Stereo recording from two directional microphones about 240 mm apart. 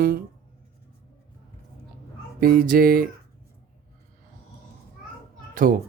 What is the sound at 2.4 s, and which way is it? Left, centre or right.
Speech, right.